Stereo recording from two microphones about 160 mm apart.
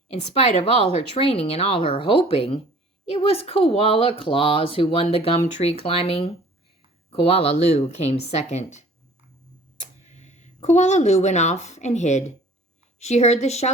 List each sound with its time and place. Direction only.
0.1 s a woman's voice: 40° left (ahead or behind)
10.1 s a woman's voice: 45° left (ahead or behind)